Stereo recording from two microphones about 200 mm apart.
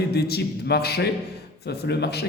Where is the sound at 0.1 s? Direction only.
55° left (ahead or behind).